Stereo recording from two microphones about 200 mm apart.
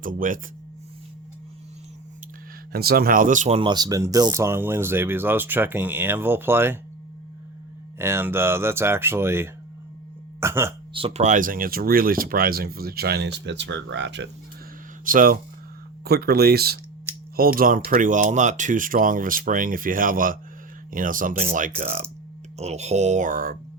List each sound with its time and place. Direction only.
0.0 s speech: 45° right (ahead or behind)
2.7 s speech: 50° right (ahead or behind)
3.6 s speech: 20° right (ahead or behind)
7.9 s speech: 10° right (ahead or behind)
10.9 s speech: 30° right (ahead or behind); by 14.3 s 60° right (ahead or behind)
15.0 s speech: 45° right (ahead or behind)